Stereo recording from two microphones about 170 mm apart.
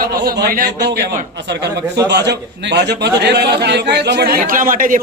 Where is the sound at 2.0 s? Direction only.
85° right.